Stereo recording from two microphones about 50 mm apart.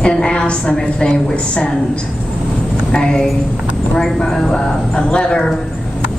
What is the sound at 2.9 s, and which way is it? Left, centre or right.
A woman's voice, centre.